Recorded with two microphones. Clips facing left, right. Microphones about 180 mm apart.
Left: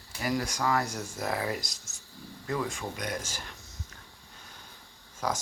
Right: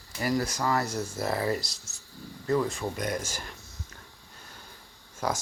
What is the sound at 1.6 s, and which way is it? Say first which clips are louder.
Speech: right 1 dB; centre (ahead or behind).